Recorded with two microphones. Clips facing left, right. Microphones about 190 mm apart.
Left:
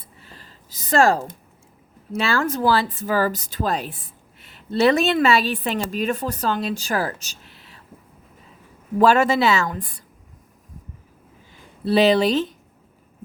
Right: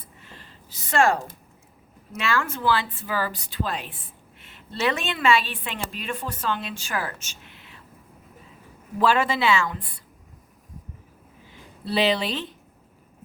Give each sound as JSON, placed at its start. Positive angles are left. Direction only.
{"t": 0.3, "sound": "a sound", "side_deg": 40}
{"t": 2.1, "sound": "speech", "side_deg": 35}
{"t": 9.0, "sound": "a woman's voice", "side_deg": 45}
{"t": 11.9, "sound": "a woman's voice", "side_deg": 45}